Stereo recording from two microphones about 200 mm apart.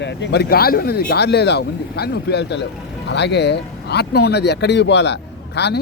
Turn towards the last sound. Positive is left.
turn(degrees=55)  # may be behind; listen again after turning